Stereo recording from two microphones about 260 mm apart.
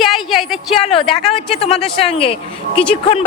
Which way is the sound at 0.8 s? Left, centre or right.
Left.